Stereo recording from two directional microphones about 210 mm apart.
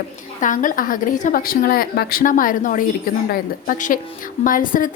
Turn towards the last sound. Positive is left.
turn(degrees=40)  # may be behind; listen again after turning